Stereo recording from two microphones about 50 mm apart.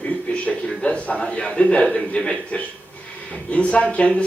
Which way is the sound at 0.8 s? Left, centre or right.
Centre.